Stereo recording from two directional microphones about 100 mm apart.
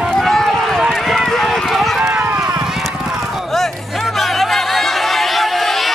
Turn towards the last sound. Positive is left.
turn(degrees=0)  # may be behind; listen again after turning